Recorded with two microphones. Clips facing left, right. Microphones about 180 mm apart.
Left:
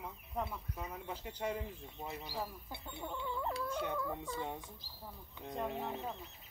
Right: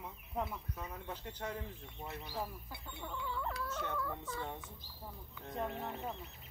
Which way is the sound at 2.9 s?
25° left (ahead or behind).